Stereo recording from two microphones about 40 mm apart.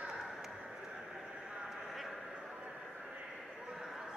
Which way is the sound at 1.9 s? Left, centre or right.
Centre.